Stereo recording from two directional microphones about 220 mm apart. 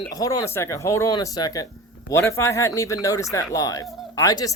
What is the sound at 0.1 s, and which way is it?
Speech, 15° left (ahead or behind).